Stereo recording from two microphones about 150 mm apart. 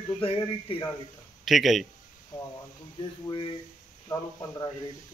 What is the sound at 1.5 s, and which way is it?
Speech, centre (ahead or behind).